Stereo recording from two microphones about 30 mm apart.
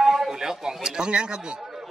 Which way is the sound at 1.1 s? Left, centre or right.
Right.